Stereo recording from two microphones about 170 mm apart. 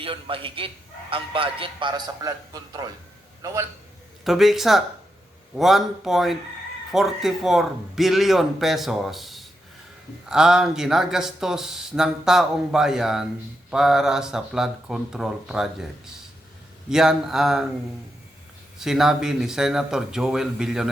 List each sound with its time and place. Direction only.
0.0 s a man's voice: 30° right (ahead or behind)
4.2 s speech: centre (ahead or behind)
16.9 s speech: 5° right (ahead or behind)
18.8 s speech: centre (ahead or behind)